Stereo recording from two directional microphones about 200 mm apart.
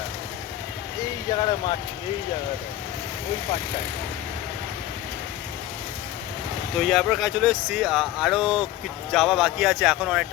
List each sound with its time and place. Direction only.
1.3 s speech: 25° left (ahead or behind)
6.7 s speech: centre (ahead or behind)